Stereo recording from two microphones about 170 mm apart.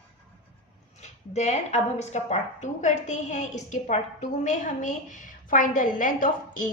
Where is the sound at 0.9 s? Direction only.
40° left (ahead or behind).